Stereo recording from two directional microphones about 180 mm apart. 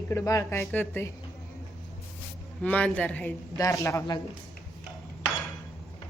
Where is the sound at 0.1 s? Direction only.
15° left (ahead or behind).